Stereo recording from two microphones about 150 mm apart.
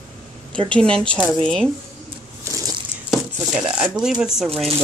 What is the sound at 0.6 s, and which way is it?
Speech, 5° left (ahead or behind).